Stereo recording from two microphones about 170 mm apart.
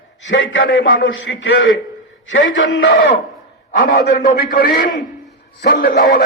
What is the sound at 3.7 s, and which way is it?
A man's voice, 60° left (ahead or behind).